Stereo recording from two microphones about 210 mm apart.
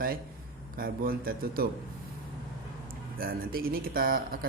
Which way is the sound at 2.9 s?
45° right (ahead or behind).